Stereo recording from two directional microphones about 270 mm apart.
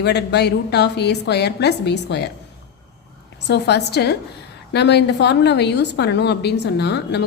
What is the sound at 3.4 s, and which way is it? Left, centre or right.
A woman's voice, left.